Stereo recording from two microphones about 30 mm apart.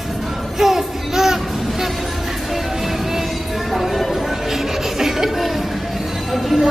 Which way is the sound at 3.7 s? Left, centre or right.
Centre.